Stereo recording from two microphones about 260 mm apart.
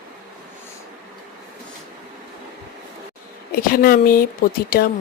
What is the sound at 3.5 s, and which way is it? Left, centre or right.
A woman's voice, left.